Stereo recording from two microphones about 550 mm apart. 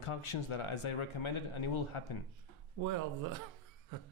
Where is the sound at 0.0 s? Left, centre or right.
Left.